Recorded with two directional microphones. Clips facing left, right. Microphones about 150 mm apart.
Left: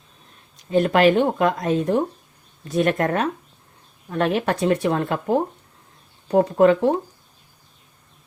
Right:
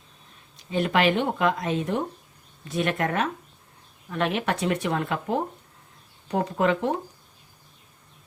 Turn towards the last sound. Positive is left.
turn(degrees=35)  # may be behind; listen again after turning